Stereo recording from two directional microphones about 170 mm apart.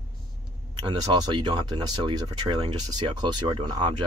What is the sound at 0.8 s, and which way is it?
Speech, 25° right (ahead or behind).